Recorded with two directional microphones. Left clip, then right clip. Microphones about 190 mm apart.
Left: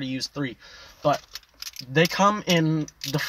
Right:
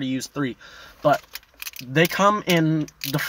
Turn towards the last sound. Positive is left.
turn(degrees=-20)  # may be behind; listen again after turning